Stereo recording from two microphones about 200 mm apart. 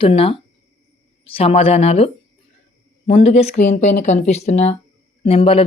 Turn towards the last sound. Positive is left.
turn(degrees=30)  # may be behind; listen again after turning